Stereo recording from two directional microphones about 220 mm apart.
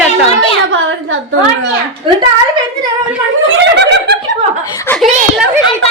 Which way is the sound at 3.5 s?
50° right (ahead or behind).